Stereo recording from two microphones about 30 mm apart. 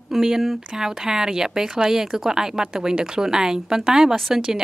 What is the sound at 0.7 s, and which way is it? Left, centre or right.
A woman's voice, centre.